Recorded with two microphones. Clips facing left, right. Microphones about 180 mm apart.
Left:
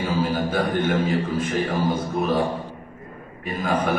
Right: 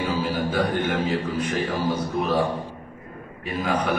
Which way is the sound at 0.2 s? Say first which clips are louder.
Left 1 dB; 45° left (ahead or behind).